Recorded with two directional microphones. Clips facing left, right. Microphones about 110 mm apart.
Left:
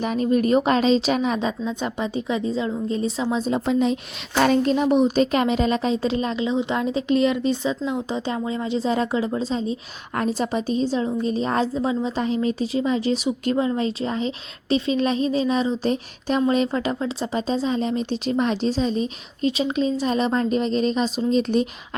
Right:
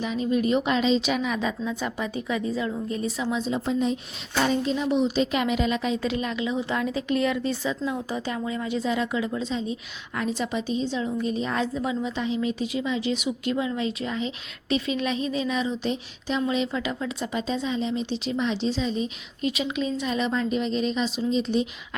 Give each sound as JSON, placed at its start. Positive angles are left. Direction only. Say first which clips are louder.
{"t": 0.0, "sound": "speech", "louder": "left 4 dB", "side_deg": 50}
{"t": 3.5, "sound": "speech", "louder": "left 5 dB", "side_deg": 90}
{"t": 4.4, "sound": "speech", "louder": "left 6 dB", "side_deg": 70}
{"t": 12.2, "sound": "speech", "louder": "left 3 dB", "side_deg": 45}